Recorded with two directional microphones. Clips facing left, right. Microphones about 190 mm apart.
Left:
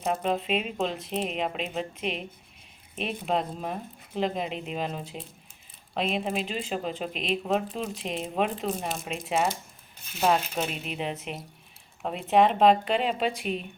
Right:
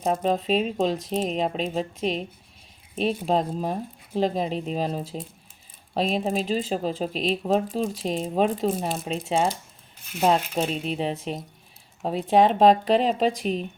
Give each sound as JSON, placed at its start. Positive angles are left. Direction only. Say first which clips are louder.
{"t": 0.0, "sound": "speech", "louder": "right 4 dB", "side_deg": -35}